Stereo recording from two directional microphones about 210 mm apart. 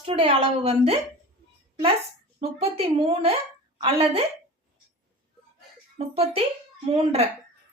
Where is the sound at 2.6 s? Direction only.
25° right (ahead or behind).